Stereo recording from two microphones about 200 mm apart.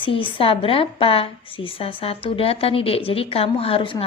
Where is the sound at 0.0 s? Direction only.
25° left (ahead or behind).